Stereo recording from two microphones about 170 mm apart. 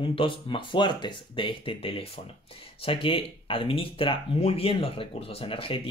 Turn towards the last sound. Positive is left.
turn(degrees=30)  # may be behind; listen again after turning